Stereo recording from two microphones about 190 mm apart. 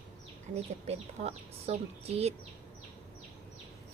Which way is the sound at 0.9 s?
35° right (ahead or behind).